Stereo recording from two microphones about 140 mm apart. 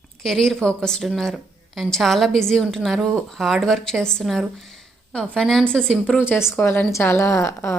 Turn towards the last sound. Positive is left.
turn(degrees=20)  # may be behind; listen again after turning